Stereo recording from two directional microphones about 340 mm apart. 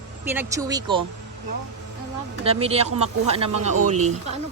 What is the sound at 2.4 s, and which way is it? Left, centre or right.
Speech, centre.